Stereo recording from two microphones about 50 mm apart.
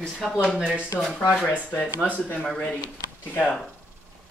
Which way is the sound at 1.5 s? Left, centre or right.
Left.